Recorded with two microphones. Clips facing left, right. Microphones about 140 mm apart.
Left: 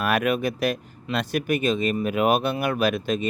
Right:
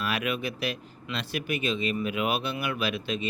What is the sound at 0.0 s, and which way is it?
Speech, 50° left (ahead or behind).